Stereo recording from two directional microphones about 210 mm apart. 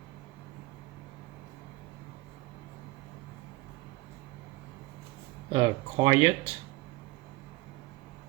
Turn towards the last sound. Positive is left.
turn(degrees=-25)  # may be behind; listen again after turning